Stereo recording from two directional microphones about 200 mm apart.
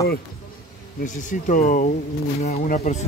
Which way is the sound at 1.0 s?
40° left (ahead or behind).